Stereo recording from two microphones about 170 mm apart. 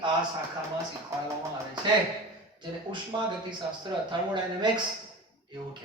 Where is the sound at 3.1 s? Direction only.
25° right (ahead or behind).